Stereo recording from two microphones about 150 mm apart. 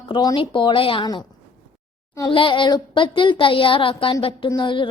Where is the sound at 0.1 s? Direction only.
30° left (ahead or behind).